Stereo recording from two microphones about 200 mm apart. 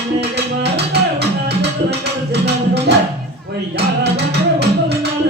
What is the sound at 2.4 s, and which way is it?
Music, 55° right (ahead or behind).